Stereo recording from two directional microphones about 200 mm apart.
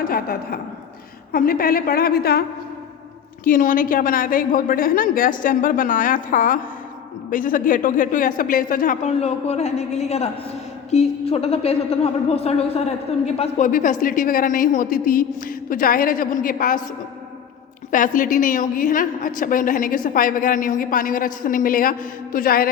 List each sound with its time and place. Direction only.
0.0 s a woman's voice: 50° left (ahead or behind)
3.4 s a woman's voice: 45° left (ahead or behind)
17.9 s a woman's voice: 40° left (ahead or behind)